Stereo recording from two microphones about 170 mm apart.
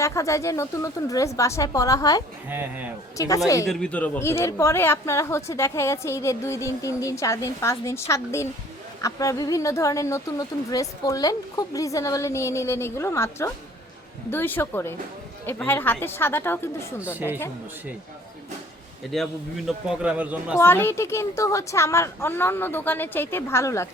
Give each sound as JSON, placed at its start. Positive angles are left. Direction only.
{"t": 0.0, "sound": "speech", "side_deg": 15}
{"t": 2.5, "sound": "speech", "side_deg": -10}
{"t": 3.2, "sound": "speech", "side_deg": 20}
{"t": 3.7, "sound": "speech", "side_deg": 5}
{"t": 17.0, "sound": "speech", "side_deg": -10}
{"t": 19.1, "sound": "a man's voice", "side_deg": 0}
{"t": 20.6, "sound": "speech", "side_deg": 15}